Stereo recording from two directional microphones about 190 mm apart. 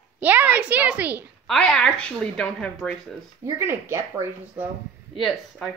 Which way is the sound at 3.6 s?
15° right (ahead or behind).